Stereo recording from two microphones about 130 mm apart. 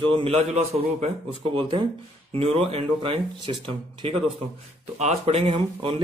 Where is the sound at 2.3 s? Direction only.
50° right (ahead or behind).